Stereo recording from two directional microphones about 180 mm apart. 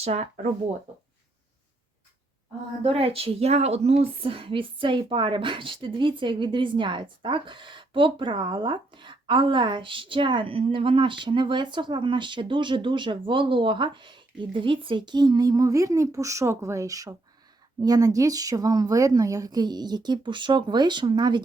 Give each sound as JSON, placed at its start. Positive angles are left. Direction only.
{"t": 0.0, "sound": "speech", "side_deg": -35}
{"t": 2.8, "sound": "a woman's voice", "side_deg": -30}